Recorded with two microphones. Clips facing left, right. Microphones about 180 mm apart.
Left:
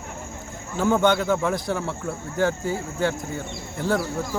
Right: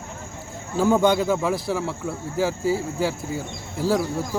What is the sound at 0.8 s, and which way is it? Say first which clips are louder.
Speech: right 2 dB; 10° right (ahead or behind).